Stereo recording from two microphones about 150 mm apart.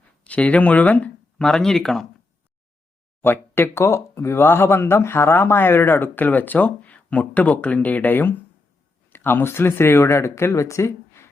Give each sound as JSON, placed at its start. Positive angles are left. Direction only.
{"t": 0.3, "sound": "speech", "side_deg": 10}
{"t": 3.2, "sound": "speech", "side_deg": 15}